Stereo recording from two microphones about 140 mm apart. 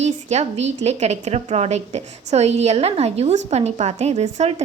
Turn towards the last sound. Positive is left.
turn(degrees=-50)  # may be behind; listen again after turning